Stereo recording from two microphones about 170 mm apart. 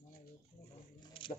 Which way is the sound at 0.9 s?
30° left (ahead or behind).